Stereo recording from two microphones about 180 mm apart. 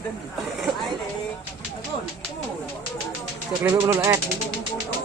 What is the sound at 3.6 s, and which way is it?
Speech, 15° right (ahead or behind).